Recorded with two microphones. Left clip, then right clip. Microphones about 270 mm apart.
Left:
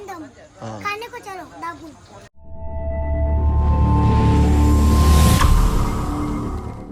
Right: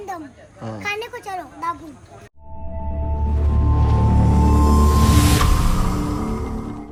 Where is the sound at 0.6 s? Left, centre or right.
Centre.